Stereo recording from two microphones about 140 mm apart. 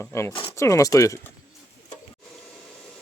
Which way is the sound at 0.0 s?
20° left (ahead or behind).